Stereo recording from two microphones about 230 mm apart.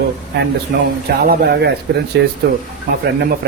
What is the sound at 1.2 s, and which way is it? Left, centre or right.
Speech, right.